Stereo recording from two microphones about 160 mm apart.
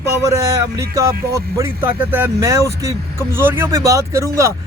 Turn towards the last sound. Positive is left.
turn(degrees=-20)  # may be behind; listen again after turning